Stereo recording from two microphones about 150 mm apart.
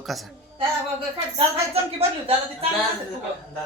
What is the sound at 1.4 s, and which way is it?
Speech, 40° right (ahead or behind).